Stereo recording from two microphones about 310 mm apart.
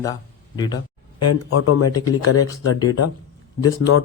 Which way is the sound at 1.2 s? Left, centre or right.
Left.